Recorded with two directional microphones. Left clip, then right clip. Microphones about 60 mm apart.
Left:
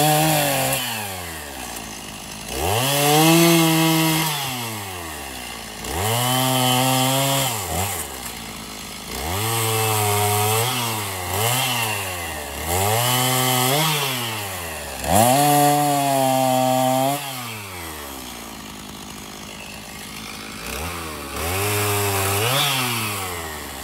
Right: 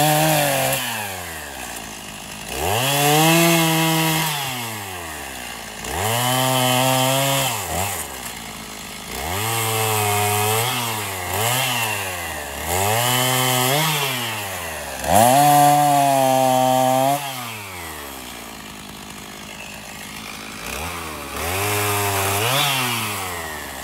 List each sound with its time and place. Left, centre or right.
0.0 s chainsaw: right
2.5 s chainsaw: right
5.9 s chainsaw: right
9.1 s chainsaw: right
21.4 s chainsaw: right